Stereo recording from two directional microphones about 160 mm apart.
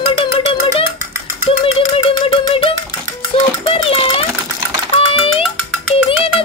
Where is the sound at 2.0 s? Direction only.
35° left (ahead or behind).